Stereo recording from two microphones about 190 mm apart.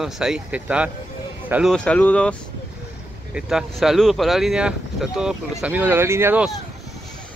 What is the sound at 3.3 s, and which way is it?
Speech, 5° right (ahead or behind).